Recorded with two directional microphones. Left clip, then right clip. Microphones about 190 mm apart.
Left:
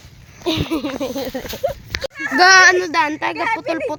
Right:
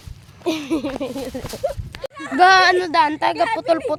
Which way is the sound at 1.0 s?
35° left (ahead or behind).